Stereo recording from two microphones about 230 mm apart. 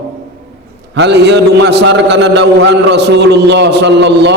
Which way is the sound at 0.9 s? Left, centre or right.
Right.